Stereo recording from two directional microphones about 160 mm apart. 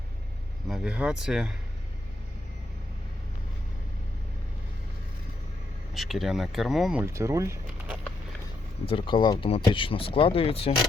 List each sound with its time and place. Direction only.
0.7 s speech: 5° right (ahead or behind)
5.9 s speech: centre (ahead or behind)
7.0 s speech: 15° right (ahead or behind)
8.9 s speech: 30° left (ahead or behind)